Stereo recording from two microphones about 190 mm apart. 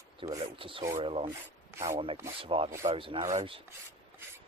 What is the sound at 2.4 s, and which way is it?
Speech, 30° right (ahead or behind).